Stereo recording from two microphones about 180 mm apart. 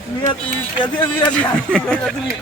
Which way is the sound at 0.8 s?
25° left (ahead or behind).